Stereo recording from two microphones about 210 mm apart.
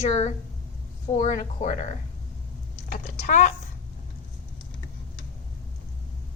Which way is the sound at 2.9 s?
40° left (ahead or behind).